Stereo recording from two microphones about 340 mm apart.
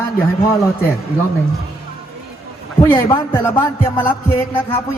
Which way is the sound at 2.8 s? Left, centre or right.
Centre.